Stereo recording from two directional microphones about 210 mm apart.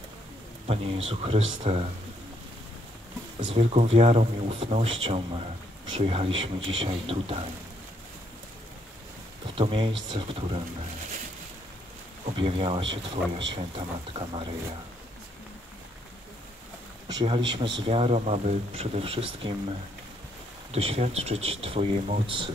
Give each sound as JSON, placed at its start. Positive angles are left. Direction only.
{"t": 0.7, "sound": "speech", "side_deg": -30}
{"t": 3.3, "sound": "speech", "side_deg": -30}
{"t": 9.6, "sound": "speech", "side_deg": -25}
{"t": 12.4, "sound": "speech", "side_deg": -25}
{"t": 17.1, "sound": "speech", "side_deg": -20}
{"t": 20.7, "sound": "speech", "side_deg": -30}